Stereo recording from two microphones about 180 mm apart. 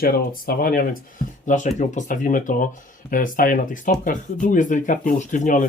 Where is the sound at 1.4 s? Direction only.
45° left (ahead or behind).